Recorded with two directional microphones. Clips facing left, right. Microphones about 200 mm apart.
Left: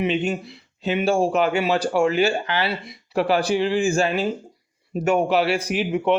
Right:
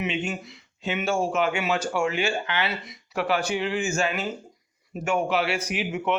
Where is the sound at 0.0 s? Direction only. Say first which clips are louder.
Left 6 dB; 35° left (ahead or behind).